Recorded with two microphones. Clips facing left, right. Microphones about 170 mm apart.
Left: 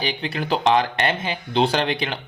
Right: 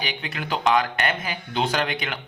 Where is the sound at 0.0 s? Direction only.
30° left (ahead or behind).